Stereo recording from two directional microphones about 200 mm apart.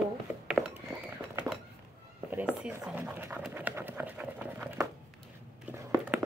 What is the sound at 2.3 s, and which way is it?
Pant, 5° right (ahead or behind).